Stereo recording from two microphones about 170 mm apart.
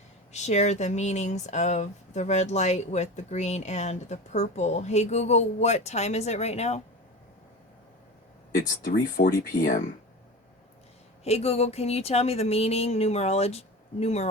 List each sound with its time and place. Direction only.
0.3 s speech: 40° left (ahead or behind)
8.5 s speech: 60° left (ahead or behind)
11.2 s speech: 40° left (ahead or behind)